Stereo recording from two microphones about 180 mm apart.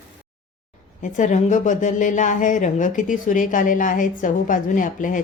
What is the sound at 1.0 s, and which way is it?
A woman's voice, 45° left (ahead or behind).